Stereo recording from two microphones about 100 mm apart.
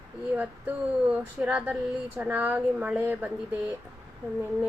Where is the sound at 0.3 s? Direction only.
15° right (ahead or behind).